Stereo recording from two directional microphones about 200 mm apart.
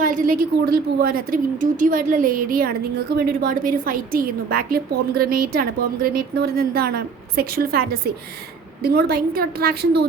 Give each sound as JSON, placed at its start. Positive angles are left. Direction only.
{"t": 0.0, "sound": "a woman's voice", "side_deg": -40}